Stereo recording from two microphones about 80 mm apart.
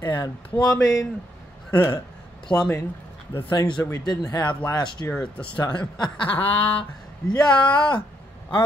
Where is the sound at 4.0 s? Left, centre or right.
Left.